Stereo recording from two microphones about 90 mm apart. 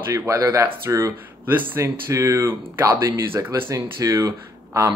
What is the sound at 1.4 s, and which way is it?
Speech, 20° right (ahead or behind).